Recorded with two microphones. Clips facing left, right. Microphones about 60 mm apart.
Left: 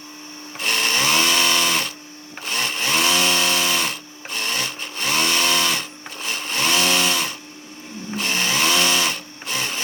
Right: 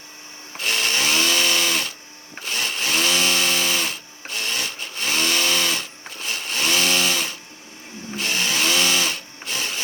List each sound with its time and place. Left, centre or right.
0.6 s tools: left
2.4 s chainsaw: left
6.2 s blender: left
8.2 s a sound: left